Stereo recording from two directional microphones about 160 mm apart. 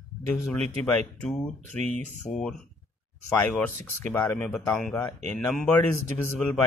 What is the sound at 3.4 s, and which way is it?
Speech, 10° left (ahead or behind).